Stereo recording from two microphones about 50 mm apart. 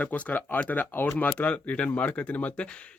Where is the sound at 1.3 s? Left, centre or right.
Left.